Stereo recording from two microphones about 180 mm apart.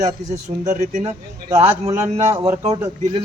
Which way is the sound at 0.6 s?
45° right (ahead or behind).